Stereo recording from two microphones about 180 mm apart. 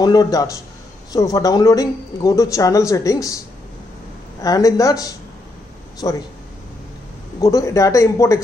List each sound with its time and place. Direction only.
0.0 s speech: 20° left (ahead or behind)
4.4 s speech: 20° left (ahead or behind)
7.3 s speech: 20° left (ahead or behind)